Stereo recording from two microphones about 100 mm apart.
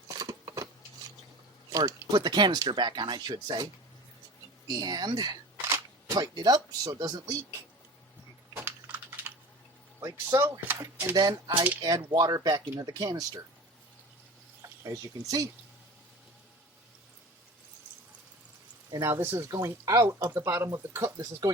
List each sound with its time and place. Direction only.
0.2 s a sound: 35° right (ahead or behind)
1.7 s speech: 35° right (ahead or behind)
4.7 s speech: 45° right (ahead or behind)
8.6 s typing: 20° right (ahead or behind)
10.0 s speech: 30° right (ahead or behind)
11.1 s speech: 45° right (ahead or behind)
14.6 s speech: 35° right (ahead or behind)
18.9 s speech: 30° right (ahead or behind)